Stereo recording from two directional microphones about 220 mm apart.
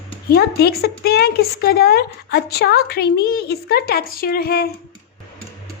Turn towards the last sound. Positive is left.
turn(degrees=45)  # may be behind; listen again after turning